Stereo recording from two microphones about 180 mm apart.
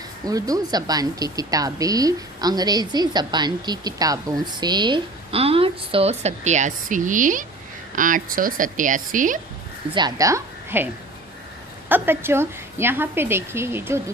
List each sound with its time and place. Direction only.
0.3 s speech: 20° right (ahead or behind); by 9.4 s 45° right (ahead or behind)
9.9 s a woman's voice: 20° right (ahead or behind)
11.9 s a woman's voice: 10° right (ahead or behind)